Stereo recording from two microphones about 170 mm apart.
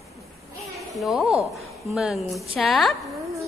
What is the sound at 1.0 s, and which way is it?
A woman's voice, centre (ahead or behind).